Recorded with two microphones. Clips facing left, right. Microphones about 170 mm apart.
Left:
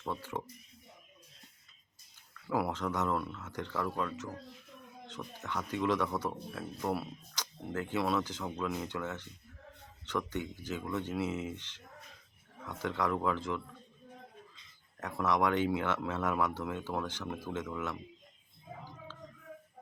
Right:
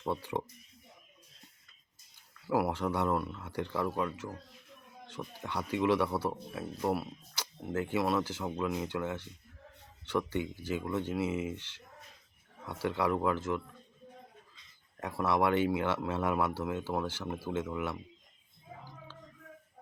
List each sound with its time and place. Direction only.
0.0 s speech: 15° right (ahead or behind)
2.6 s speech: 10° right (ahead or behind)
15.0 s speech: 10° right (ahead or behind)